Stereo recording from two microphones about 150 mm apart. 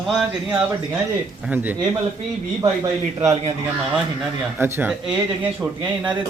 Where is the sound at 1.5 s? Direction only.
10° right (ahead or behind).